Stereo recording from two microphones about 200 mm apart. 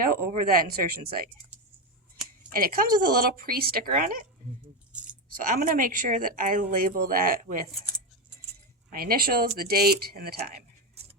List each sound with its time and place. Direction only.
0.0 s speech: 45° right (ahead or behind)
2.5 s speech: 45° right (ahead or behind)
8.9 s speech: 45° right (ahead or behind)